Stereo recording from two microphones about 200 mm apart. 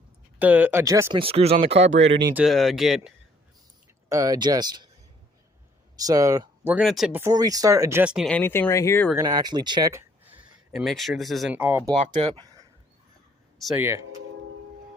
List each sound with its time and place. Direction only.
0.3 s speech: 10° right (ahead or behind)
1.2 s speech: 30° right (ahead or behind)
2.0 s speech: 60° right (ahead or behind)
2.3 s speech: centre (ahead or behind)
4.1 s speech: 20° right (ahead or behind)
6.0 s speech: 20° right (ahead or behind)
6.7 s speech: centre (ahead or behind); by 9.0 s 15° left (ahead or behind)
9.1 s speech: 20° right (ahead or behind)
11.9 s speech: 25° right (ahead or behind)
13.6 s speech: centre (ahead or behind)